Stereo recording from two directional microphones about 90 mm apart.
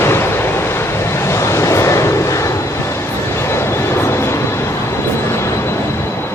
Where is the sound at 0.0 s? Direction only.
25° left (ahead or behind).